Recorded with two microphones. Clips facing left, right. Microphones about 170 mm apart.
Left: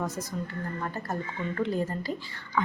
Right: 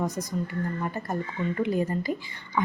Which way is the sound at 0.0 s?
15° right (ahead or behind).